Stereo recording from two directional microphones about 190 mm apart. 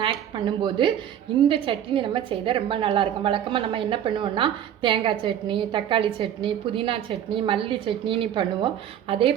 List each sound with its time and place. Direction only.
0.0 s a woman's voice: 25° right (ahead or behind)